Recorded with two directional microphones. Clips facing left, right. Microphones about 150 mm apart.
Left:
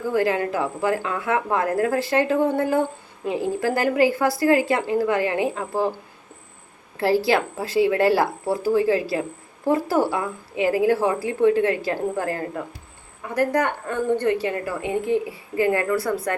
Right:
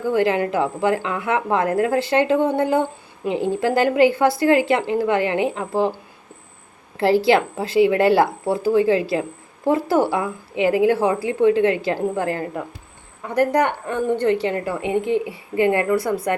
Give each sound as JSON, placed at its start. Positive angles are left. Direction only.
{"t": 0.1, "sound": "a woman's voice", "side_deg": -20}
{"t": 7.0, "sound": "a woman's voice", "side_deg": -25}